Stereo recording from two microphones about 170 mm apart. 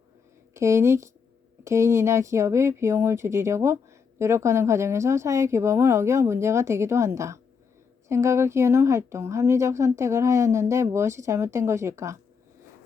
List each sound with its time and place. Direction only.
0.5 s a woman's voice: 15° right (ahead or behind)